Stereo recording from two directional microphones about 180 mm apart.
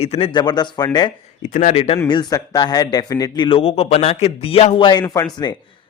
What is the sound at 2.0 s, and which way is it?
A man's voice, 20° left (ahead or behind).